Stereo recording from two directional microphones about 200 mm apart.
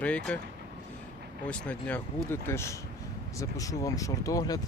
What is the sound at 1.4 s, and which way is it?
Speech, 5° left (ahead or behind).